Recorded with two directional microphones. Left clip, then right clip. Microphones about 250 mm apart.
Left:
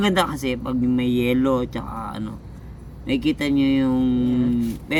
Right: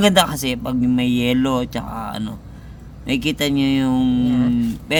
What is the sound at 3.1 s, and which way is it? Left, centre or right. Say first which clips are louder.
Speech: right 2 dB; right.